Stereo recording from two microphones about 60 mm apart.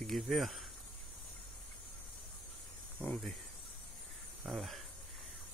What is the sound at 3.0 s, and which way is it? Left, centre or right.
Speech, left.